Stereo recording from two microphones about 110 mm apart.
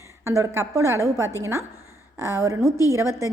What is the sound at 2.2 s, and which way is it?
A woman's voice, 25° right (ahead or behind).